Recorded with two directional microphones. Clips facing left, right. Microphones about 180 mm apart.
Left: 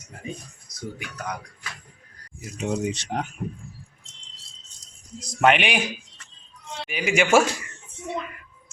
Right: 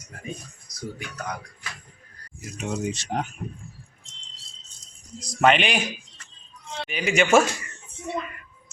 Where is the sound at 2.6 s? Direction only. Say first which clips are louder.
Left 2 dB; 15° left (ahead or behind).